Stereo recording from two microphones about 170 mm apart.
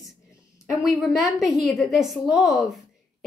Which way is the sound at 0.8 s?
Centre (ahead or behind).